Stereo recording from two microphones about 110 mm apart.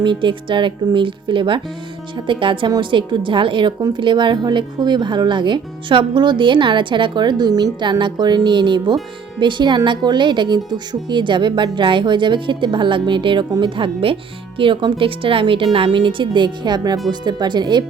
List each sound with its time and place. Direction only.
0.0 s a woman's voice: 45° right (ahead or behind)